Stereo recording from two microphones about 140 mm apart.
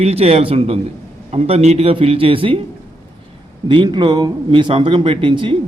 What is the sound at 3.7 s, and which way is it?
Speech, 35° right (ahead or behind).